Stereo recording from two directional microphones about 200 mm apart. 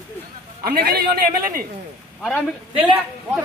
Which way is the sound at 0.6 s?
45° right (ahead or behind).